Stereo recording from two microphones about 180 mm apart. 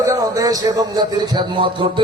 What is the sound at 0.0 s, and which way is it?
A man's voice, 15° right (ahead or behind).